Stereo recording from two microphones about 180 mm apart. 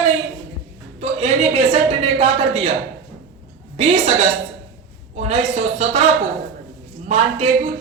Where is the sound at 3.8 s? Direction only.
35° right (ahead or behind).